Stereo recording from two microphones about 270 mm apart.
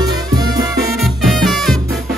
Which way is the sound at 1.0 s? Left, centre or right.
Centre.